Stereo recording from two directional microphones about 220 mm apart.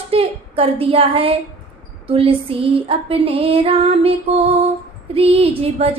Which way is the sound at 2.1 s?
25° right (ahead or behind).